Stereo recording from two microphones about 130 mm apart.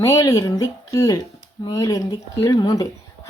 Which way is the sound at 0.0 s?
25° left (ahead or behind).